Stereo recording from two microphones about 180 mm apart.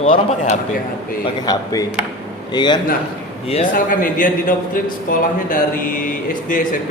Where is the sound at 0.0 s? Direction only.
40° left (ahead or behind).